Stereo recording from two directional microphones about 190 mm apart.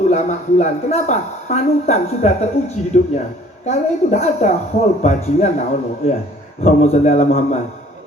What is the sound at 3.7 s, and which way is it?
Speech, 35° left (ahead or behind).